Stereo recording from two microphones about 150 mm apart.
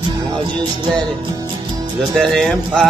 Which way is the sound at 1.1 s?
30° right (ahead or behind).